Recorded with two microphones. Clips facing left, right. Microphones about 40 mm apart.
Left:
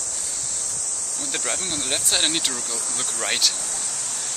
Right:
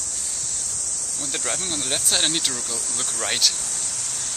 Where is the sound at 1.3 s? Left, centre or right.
Centre.